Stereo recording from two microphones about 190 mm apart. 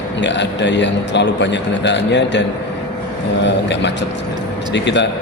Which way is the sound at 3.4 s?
65° left (ahead or behind).